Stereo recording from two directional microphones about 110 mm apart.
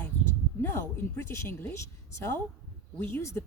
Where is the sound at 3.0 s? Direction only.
20° left (ahead or behind).